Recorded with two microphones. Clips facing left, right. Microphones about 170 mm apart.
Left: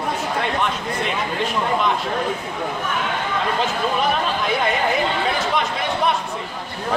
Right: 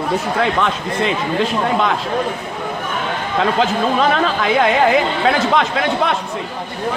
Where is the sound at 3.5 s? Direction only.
90° right.